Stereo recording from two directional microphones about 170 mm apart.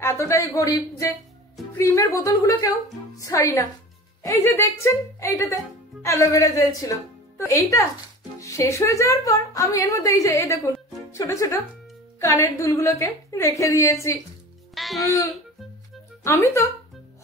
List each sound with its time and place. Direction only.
0.0 s a woman's voice: 15° left (ahead or behind)
14.7 s music: centre (ahead or behind)
16.3 s a woman's voice: 15° left (ahead or behind)